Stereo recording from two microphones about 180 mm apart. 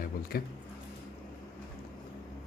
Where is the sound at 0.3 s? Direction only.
55° left (ahead or behind).